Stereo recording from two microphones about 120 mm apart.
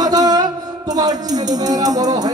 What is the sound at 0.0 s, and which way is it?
Music, 35° right (ahead or behind).